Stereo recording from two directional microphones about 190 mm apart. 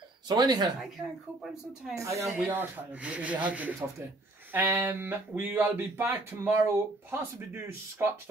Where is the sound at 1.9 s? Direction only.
15° right (ahead or behind).